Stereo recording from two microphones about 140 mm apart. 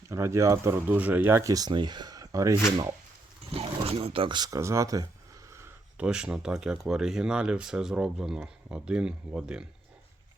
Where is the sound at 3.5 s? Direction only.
45° right (ahead or behind); by 5.7 s 20° right (ahead or behind).